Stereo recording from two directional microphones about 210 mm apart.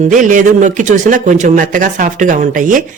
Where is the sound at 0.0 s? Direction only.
35° right (ahead or behind).